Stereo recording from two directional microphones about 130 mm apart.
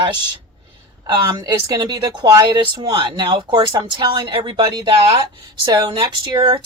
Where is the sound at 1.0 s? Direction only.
30° right (ahead or behind).